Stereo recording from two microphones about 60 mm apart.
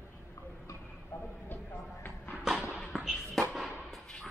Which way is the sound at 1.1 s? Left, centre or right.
Left.